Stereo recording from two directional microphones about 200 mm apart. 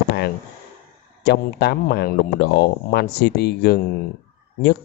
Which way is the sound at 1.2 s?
55° left (ahead or behind).